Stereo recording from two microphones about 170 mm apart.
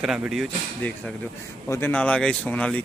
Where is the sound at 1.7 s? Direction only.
10° left (ahead or behind).